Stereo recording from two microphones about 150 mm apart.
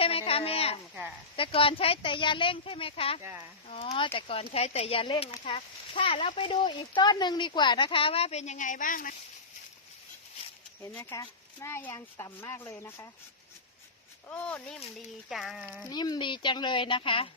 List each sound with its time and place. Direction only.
0.0 s a sound: 40° left (ahead or behind)
1.4 s speech: 40° left (ahead or behind); by 9.1 s 65° left (ahead or behind)
11.1 s speech: 20° left (ahead or behind)
14.3 s speech: 10° left (ahead or behind)
15.9 s speech: 30° left (ahead or behind)